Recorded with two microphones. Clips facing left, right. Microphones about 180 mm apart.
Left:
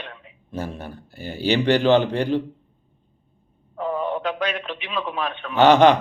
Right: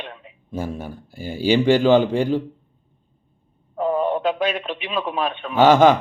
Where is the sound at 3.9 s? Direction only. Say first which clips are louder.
Right 4 dB; 45° right (ahead or behind).